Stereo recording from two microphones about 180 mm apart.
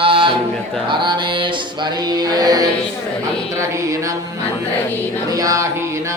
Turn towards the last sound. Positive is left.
turn(degrees=-20)  # may be behind; listen again after turning